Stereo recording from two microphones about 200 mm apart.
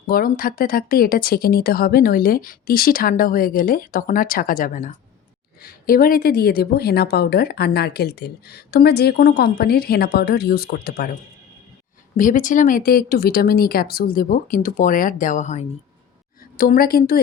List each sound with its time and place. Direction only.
0.1 s a woman's voice: 45° left (ahead or behind)